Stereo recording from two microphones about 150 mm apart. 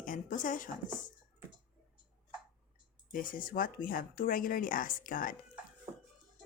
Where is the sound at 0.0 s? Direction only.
60° left (ahead or behind).